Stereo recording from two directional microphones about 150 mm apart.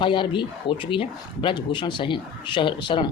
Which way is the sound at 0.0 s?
35° left (ahead or behind).